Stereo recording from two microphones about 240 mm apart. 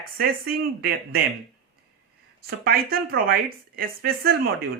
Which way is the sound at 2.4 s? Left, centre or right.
Right.